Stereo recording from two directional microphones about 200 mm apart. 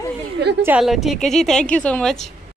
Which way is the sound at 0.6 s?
5° right (ahead or behind).